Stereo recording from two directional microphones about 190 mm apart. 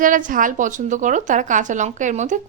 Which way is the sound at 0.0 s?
45° right (ahead or behind).